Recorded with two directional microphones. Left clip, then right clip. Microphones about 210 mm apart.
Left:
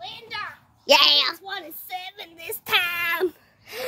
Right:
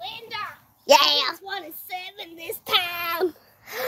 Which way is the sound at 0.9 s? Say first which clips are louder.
Left 1 dB; centre (ahead or behind).